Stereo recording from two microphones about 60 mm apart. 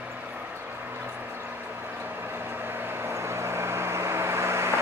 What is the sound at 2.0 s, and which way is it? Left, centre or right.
Vehicle, right.